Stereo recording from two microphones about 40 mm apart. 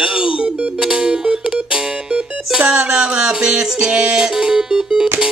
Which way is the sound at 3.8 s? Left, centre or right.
Right.